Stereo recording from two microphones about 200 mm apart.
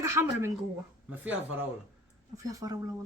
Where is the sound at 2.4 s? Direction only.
20° right (ahead or behind).